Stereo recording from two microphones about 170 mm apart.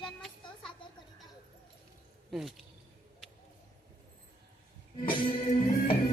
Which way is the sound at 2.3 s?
Centre (ahead or behind).